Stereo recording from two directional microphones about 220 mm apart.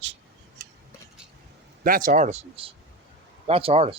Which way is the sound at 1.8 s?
40° right (ahead or behind).